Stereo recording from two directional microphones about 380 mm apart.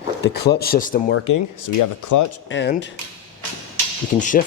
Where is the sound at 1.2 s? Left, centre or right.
Left.